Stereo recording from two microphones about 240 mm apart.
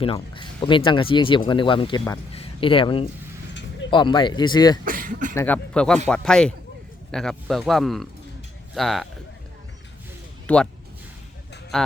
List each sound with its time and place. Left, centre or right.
0.0 s speech: left
4.9 s speech: right
5.3 s speech: centre
10.4 s speech: centre
11.7 s speech: centre